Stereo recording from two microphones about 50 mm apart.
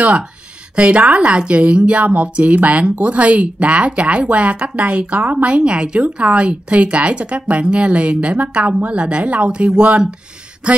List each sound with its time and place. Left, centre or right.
0.7 s a woman's voice: right